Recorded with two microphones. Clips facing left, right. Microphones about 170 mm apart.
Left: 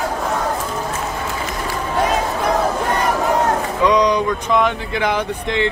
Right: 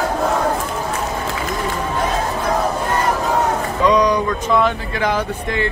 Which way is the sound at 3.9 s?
15° left (ahead or behind).